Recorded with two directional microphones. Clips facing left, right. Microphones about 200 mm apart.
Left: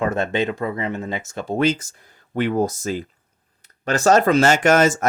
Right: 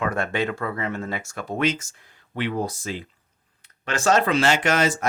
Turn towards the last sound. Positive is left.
turn(degrees=45)  # may be behind; listen again after turning